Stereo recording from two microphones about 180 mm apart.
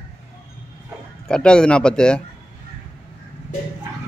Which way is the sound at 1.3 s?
5° left (ahead or behind).